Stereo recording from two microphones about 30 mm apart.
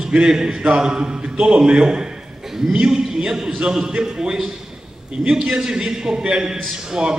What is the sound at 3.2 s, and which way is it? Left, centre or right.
A man's voice, centre.